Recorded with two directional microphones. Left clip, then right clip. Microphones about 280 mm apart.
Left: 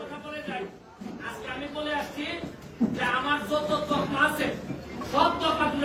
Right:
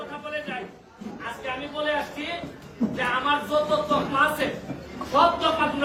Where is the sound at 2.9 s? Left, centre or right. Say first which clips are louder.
Right 3 dB; centre.